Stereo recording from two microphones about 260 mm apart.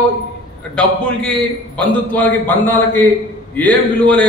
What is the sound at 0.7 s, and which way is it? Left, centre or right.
A man's voice, centre.